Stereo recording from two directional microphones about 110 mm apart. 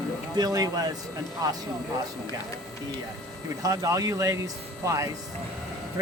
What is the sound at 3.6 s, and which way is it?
Speech, 35° right (ahead or behind).